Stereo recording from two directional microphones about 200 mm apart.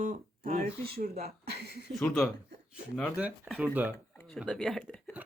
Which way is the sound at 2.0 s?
Centre (ahead or behind).